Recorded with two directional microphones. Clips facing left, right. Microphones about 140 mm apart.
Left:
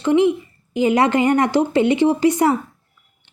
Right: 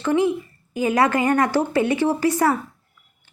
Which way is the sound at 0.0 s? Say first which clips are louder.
Left 4 dB; 20° left (ahead or behind).